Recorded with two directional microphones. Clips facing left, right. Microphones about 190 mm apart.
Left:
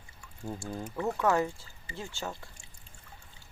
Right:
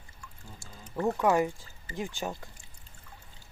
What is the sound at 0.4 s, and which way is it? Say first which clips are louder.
Speech: left 15 dB; 55° left (ahead or behind).